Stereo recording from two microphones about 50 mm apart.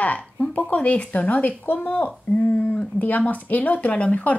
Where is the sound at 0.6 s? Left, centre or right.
Left.